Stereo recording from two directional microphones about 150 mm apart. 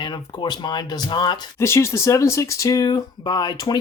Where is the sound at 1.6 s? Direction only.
20° left (ahead or behind).